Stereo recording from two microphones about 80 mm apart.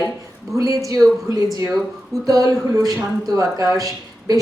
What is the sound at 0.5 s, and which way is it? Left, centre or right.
Speech, right.